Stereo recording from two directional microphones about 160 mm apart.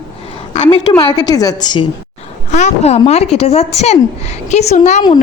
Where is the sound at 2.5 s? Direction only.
45° left (ahead or behind).